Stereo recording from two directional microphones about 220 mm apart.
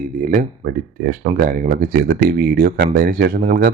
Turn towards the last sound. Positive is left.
turn(degrees=-40)  # may be behind; listen again after turning